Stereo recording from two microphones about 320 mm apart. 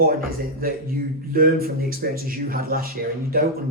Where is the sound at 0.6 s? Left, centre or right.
Right.